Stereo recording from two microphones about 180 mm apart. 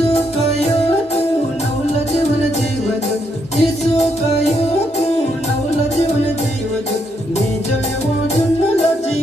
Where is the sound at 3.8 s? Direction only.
35° left (ahead or behind).